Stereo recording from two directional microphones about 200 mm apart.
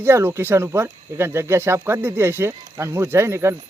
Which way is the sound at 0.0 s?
10° right (ahead or behind).